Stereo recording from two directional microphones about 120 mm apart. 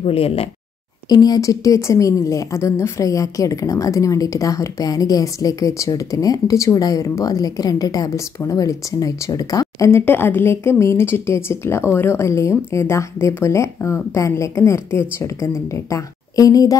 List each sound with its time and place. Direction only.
0.0 s speech: 55° left (ahead or behind)
1.0 s a woman's voice: 35° left (ahead or behind)